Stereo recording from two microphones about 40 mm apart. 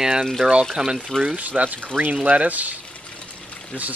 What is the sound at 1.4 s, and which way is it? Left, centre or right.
Speech, right.